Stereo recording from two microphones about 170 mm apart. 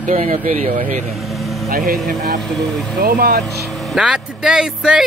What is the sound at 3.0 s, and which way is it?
Speech, 60° right (ahead or behind).